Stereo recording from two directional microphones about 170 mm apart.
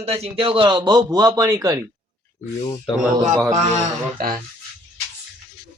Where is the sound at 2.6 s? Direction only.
25° left (ahead or behind).